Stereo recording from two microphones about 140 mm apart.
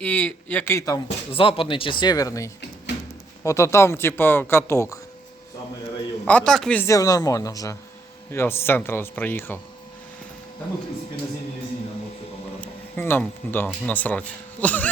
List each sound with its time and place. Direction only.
0.0 s speech: 10° left (ahead or behind)
1.3 s speech: 40° left (ahead or behind); by 4.9 s 20° left (ahead or behind)
6.2 s speech: 10° left (ahead or behind)
6.8 s speech: 25° left (ahead or behind)
13.0 s speech: 15° left (ahead or behind)